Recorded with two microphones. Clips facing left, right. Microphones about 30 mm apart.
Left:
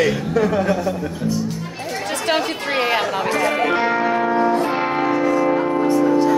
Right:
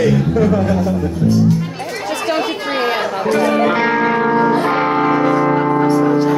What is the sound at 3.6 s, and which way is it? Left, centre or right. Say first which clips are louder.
Music: right 3 dB; right.